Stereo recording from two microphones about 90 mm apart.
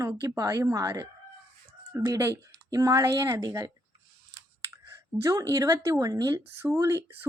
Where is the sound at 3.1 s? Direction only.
50° right (ahead or behind).